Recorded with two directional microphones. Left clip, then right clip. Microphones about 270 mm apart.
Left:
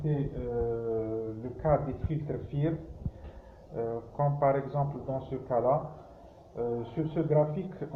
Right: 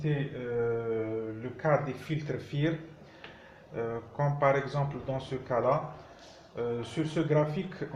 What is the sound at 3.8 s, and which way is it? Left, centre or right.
Speech, right.